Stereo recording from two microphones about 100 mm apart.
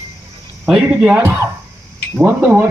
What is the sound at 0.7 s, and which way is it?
Speech, 5° right (ahead or behind).